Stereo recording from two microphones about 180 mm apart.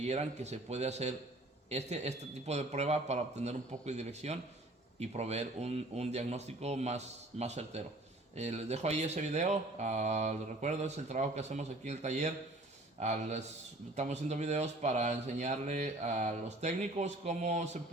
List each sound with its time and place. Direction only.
0.0 s speech: 40° right (ahead or behind)